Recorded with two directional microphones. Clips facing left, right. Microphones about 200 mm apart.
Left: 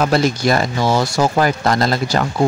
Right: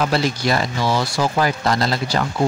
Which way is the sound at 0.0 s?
45° left (ahead or behind).